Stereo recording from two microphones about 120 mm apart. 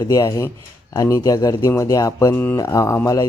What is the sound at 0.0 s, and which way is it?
Speech, 30° left (ahead or behind).